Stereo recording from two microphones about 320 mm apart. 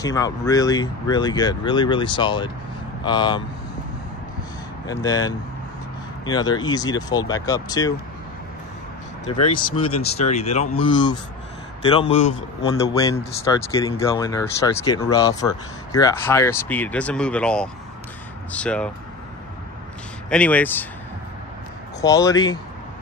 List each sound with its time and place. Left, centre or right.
0.0 s a man's voice: centre
4.8 s a man's voice: centre
9.4 s a man's voice: left; by 18.9 s centre
20.2 s speech: centre
22.0 s a man's voice: centre